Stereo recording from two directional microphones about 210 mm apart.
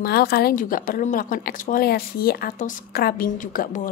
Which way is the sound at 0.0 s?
50° left (ahead or behind).